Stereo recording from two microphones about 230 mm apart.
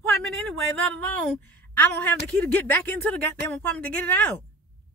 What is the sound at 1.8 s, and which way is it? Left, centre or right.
Speech, centre.